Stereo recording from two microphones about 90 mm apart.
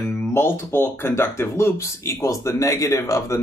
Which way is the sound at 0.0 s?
30° left (ahead or behind).